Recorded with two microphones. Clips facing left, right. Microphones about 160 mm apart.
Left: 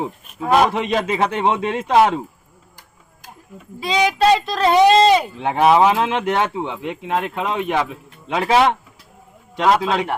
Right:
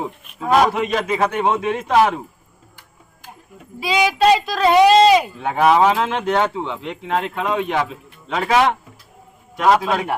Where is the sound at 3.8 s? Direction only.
5° right (ahead or behind).